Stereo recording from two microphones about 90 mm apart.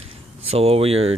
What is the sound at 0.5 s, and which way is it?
Speech, 90° right.